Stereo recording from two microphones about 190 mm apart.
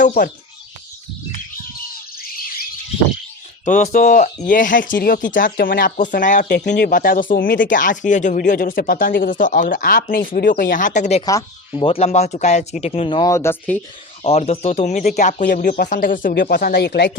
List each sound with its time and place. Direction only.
0.0 s speech: 45° left (ahead or behind)
3.7 s speech: 40° left (ahead or behind); by 13.8 s 10° left (ahead or behind)
14.3 s speech: 30° left (ahead or behind); by 17.1 s 60° left (ahead or behind)